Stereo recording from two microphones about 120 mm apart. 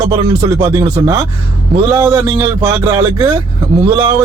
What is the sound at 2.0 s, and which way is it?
Speech, 20° right (ahead or behind).